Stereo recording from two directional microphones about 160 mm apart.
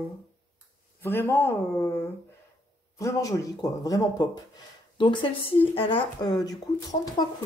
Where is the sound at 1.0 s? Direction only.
15° left (ahead or behind).